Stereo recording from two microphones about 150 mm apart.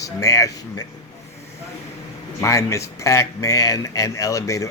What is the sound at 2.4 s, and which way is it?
A man's voice, 20° left (ahead or behind).